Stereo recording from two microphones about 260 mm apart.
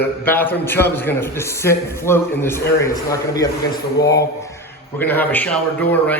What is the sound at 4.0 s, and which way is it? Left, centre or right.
Speech, left.